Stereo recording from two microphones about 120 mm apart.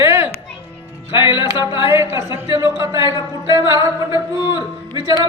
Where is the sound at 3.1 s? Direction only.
35° left (ahead or behind).